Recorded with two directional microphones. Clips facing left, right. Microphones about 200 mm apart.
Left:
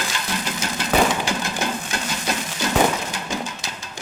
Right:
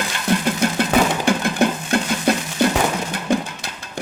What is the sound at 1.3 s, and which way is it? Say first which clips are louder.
Stir: right 7 dB; 55° right (ahead or behind).